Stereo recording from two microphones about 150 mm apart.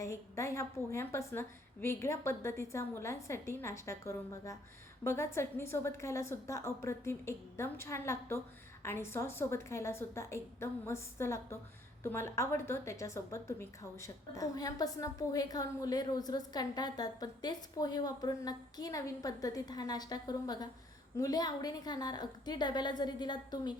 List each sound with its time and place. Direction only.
0.0 s a woman's voice: 20° left (ahead or behind)